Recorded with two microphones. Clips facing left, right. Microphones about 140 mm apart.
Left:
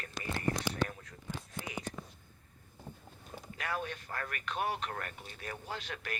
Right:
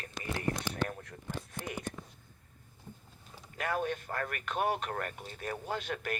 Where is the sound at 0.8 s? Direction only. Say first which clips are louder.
Even; 55° right (ahead or behind).